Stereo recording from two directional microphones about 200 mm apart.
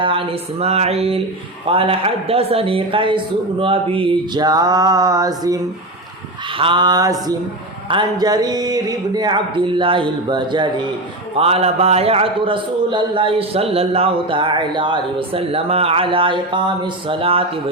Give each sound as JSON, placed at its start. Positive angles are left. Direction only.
{"t": 0.0, "sound": "a man's voice", "side_deg": -25}
{"t": 6.6, "sound": "a man's voice", "side_deg": -25}